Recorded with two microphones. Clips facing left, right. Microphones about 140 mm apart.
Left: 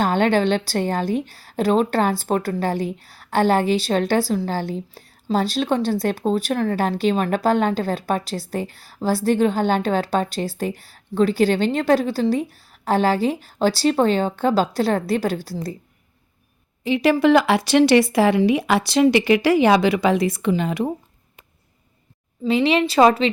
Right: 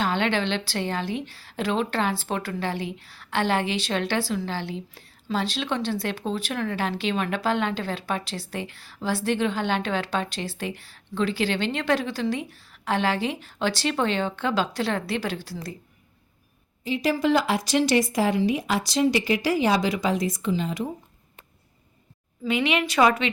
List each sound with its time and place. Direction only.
0.0 s a woman's voice: 45° left (ahead or behind)
16.8 s speech: 70° left (ahead or behind)
22.4 s a woman's voice: 35° left (ahead or behind)